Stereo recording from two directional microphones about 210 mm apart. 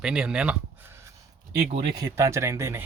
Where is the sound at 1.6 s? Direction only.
30° right (ahead or behind).